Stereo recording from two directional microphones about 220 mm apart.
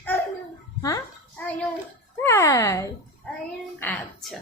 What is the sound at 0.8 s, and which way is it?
A child's voice, 10° left (ahead or behind).